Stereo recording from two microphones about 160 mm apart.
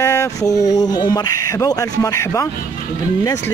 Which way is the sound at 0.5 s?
45° left (ahead or behind).